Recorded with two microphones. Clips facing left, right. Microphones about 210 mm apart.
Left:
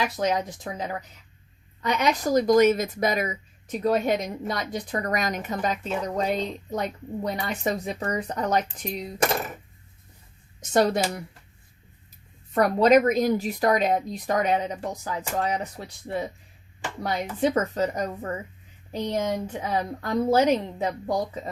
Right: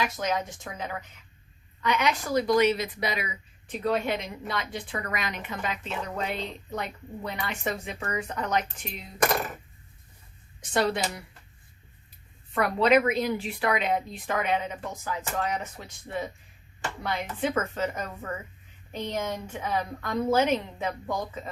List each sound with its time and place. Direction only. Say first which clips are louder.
0.0 s speech: left 3 dB; 35° left (ahead or behind)
10.6 s speech: left 5 dB; 45° left (ahead or behind)
12.5 s speech: left 4 dB; 40° left (ahead or behind)